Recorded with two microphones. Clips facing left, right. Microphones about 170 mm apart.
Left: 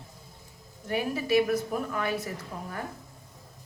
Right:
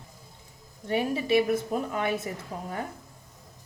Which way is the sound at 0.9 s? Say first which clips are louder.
Right 2 dB; 25° right (ahead or behind).